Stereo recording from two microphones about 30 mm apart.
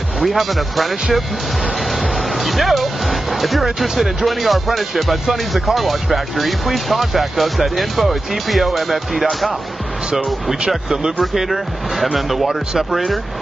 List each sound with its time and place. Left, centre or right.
0.2 s speech: centre
2.1 s speech: centre
10.9 s speech: right
11.3 s speech: centre